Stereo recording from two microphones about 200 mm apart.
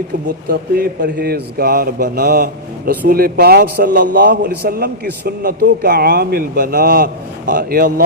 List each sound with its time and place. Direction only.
0.4 s a man's voice: 50° right (ahead or behind)